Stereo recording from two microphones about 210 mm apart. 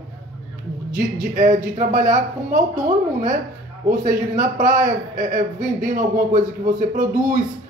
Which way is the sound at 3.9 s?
35° right (ahead or behind).